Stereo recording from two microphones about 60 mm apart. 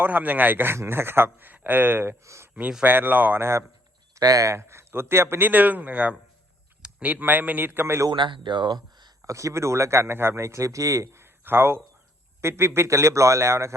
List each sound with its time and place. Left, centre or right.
0.0 s speech: right
2.2 s speech: right
2.8 s speech: right
4.1 s speech: right
5.5 s speech: right
9.2 s speech: right
11.2 s a sound: right
12.4 s speech: right